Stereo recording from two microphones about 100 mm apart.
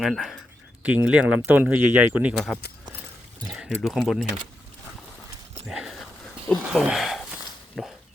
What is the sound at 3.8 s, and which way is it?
Speech, centre (ahead or behind).